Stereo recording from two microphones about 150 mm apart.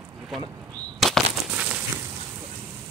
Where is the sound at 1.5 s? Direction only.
10° right (ahead or behind).